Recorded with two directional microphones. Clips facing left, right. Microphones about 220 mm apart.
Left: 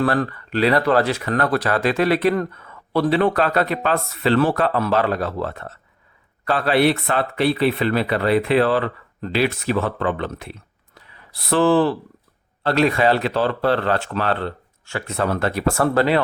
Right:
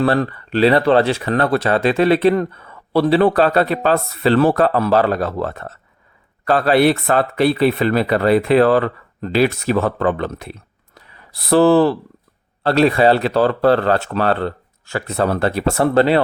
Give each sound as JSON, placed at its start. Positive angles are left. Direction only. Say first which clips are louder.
{"t": 0.0, "sound": "speech", "louder": "right 3 dB", "side_deg": -25}